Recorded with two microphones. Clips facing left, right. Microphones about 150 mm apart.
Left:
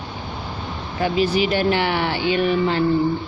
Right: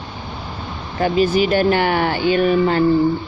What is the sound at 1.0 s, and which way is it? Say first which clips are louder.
Speech: right 3 dB; 45° right (ahead or behind).